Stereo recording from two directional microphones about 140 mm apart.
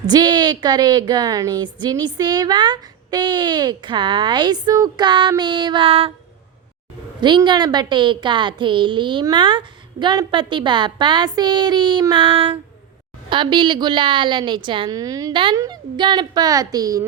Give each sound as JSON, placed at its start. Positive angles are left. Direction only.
{"t": 0.0, "sound": "a woman's voice", "side_deg": -30}
{"t": 7.2, "sound": "a woman's voice", "side_deg": -30}